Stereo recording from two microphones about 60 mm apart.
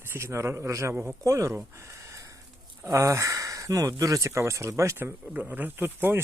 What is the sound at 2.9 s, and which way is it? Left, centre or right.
Speech, right.